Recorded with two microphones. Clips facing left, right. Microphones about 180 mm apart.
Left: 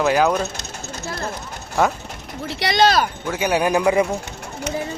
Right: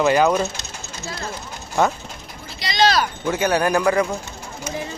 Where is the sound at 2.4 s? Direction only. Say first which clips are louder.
Left 2 dB; 65° left (ahead or behind).